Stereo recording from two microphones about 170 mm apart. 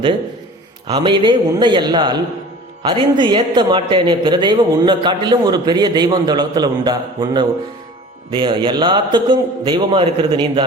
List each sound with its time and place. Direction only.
0.9 s a man's voice: 25° right (ahead or behind)